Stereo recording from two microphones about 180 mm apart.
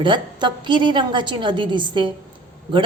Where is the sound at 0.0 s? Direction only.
25° right (ahead or behind).